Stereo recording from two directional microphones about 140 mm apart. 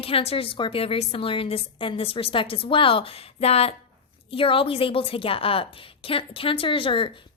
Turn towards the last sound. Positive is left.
turn(degrees=40)  # may be behind; listen again after turning